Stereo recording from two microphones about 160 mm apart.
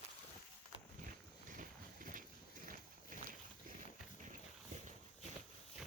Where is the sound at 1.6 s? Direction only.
60° right (ahead or behind).